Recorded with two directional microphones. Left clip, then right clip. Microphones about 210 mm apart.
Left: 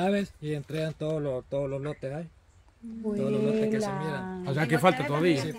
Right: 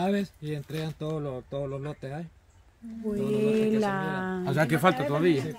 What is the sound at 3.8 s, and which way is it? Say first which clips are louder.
Speech: right 3 dB; 30° right (ahead or behind).